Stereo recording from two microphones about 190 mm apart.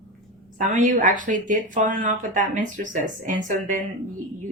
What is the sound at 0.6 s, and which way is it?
Speech, 40° right (ahead or behind).